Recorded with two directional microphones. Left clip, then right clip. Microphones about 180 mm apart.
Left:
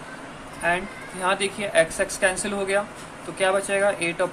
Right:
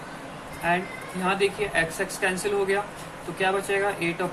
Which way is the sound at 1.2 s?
50° left (ahead or behind).